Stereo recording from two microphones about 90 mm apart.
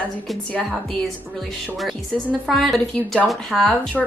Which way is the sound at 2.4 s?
Centre (ahead or behind).